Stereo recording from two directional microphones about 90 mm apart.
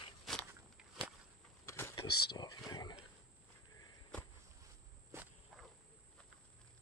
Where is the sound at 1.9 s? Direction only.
60° left (ahead or behind).